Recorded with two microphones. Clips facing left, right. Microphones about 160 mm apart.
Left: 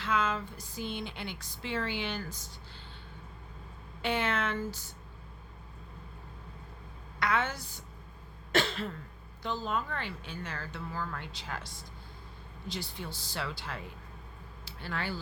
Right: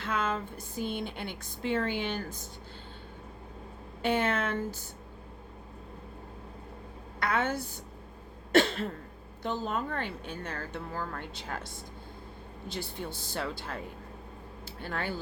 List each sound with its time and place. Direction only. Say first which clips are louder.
0.0 s speech: even; 50° right (ahead or behind)
4.0 s speech: right 3 dB; 45° right (ahead or behind)
7.2 s speech: right 2 dB; 50° right (ahead or behind)
8.5 s cough: right 5 dB; 50° right (ahead or behind)
9.4 s speech: right 2 dB; 55° right (ahead or behind)